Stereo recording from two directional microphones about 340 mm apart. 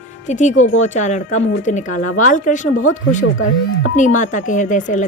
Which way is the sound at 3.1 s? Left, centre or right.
Left.